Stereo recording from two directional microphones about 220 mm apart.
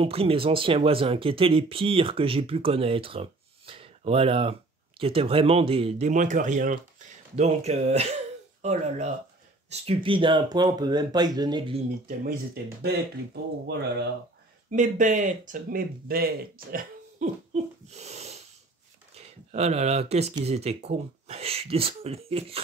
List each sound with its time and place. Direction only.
0.0 s speech: 25° right (ahead or behind)
12.8 s speech: 45° right (ahead or behind)
14.7 s speech: 35° right (ahead or behind)